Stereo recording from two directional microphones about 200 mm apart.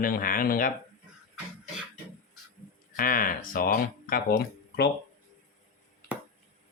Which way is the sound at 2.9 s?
45° left (ahead or behind).